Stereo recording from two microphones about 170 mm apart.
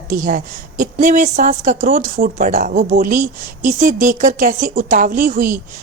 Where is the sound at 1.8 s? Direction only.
60° right (ahead or behind).